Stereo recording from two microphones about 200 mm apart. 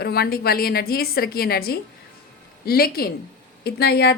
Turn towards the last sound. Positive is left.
turn(degrees=50)  # may be behind; listen again after turning